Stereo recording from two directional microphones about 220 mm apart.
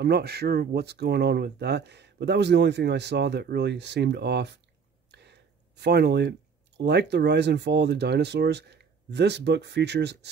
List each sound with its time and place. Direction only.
0.0 s speech: 45° right (ahead or behind)
5.1 s a sound: 50° right (ahead or behind)
6.8 s speech: 50° right (ahead or behind)